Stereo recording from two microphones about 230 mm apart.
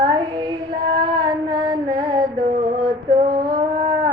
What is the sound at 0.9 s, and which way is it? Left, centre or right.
Mantra, centre.